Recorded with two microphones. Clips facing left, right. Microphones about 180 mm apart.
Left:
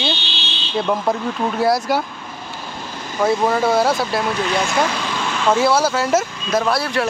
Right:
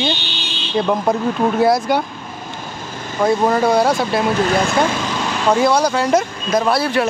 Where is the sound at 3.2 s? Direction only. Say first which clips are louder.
Right 2 dB; centre (ahead or behind).